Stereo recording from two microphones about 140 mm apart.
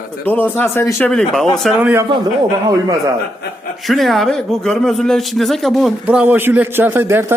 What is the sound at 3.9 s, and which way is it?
Speech, centre (ahead or behind).